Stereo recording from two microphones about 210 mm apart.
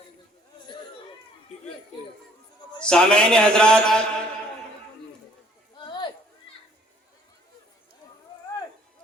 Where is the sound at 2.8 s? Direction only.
5° left (ahead or behind).